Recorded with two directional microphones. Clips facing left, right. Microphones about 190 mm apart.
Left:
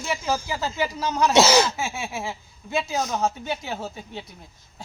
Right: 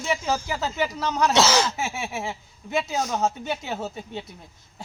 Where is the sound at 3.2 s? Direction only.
25° right (ahead or behind).